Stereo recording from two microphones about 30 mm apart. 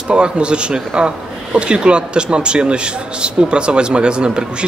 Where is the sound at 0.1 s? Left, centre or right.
Right.